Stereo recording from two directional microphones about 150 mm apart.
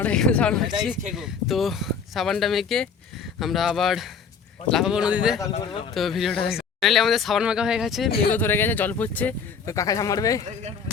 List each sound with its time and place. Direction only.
0.0 s speech: 5° left (ahead or behind)
8.3 s speech: 15° left (ahead or behind)
9.7 s speech: 20° left (ahead or behind)